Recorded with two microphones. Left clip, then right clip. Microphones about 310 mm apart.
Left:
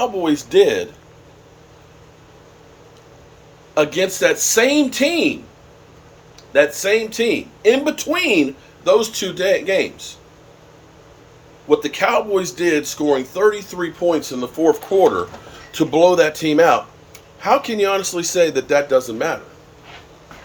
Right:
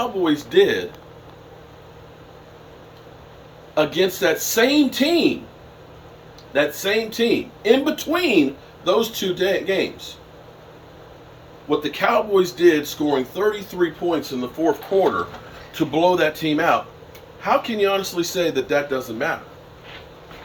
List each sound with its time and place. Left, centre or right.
0.0 s speech: centre
3.8 s speech: centre
6.5 s speech: centre
11.7 s speech: centre